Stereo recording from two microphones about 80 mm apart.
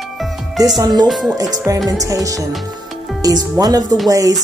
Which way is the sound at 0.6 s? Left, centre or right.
Right.